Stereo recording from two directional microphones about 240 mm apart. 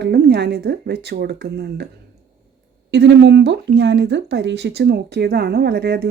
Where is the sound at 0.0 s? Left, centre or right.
Right.